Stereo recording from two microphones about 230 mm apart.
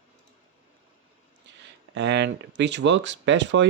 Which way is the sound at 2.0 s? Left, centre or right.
Right.